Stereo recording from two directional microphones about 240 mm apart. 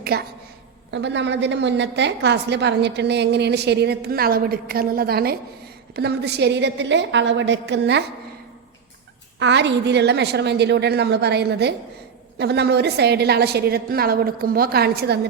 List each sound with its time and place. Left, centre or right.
0.0 s a woman's voice: right
9.4 s a woman's voice: right